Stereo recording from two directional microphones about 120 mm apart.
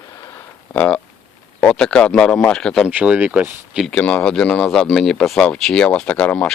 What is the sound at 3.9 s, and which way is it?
Speech, 10° left (ahead or behind).